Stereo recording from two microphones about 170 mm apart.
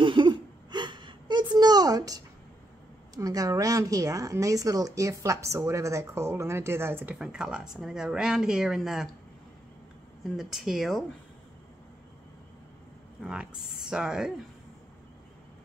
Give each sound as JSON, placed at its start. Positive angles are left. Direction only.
{"t": 0.0, "sound": "a sound", "side_deg": -30}
{"t": 3.2, "sound": "speech", "side_deg": -20}
{"t": 10.3, "sound": "speech", "side_deg": 0}
{"t": 13.2, "sound": "speech", "side_deg": -5}